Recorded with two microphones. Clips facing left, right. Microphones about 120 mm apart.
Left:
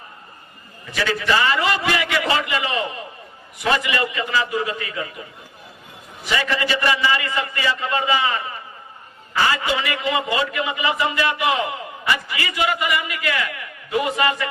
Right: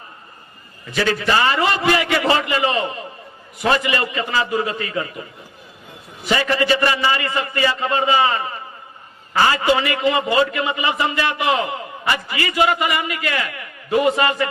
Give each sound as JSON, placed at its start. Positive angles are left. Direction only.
{"t": 0.9, "sound": "a man's voice", "side_deg": -40}
{"t": 6.2, "sound": "a man's voice", "side_deg": -35}